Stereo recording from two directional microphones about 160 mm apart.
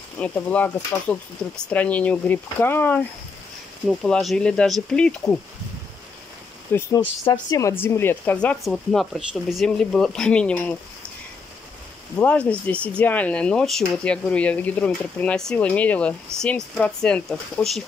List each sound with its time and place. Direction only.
0.2 s speech: 10° left (ahead or behind)
6.7 s speech: 15° left (ahead or behind)
12.2 s speech: 10° left (ahead or behind)